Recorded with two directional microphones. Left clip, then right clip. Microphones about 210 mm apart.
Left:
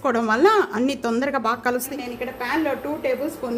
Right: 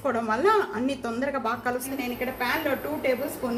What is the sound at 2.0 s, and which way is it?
Speech, 30° left (ahead or behind).